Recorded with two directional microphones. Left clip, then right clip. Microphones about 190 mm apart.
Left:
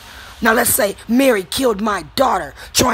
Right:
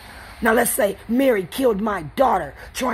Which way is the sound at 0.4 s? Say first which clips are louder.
Left 3 dB; 20° left (ahead or behind).